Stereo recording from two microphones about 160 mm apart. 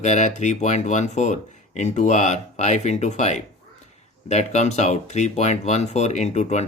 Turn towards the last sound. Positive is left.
turn(degrees=45)  # may be behind; listen again after turning